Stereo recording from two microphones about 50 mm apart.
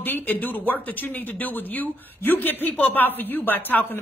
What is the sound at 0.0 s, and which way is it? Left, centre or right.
A woman's voice, left.